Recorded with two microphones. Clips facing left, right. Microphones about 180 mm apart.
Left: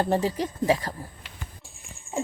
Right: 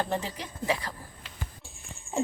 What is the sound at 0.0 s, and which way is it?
Speech, 40° left (ahead or behind).